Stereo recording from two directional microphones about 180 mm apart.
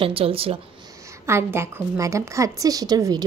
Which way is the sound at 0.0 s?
30° right (ahead or behind).